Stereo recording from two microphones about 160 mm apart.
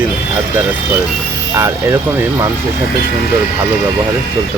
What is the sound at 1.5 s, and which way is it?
Speech, 15° right (ahead or behind).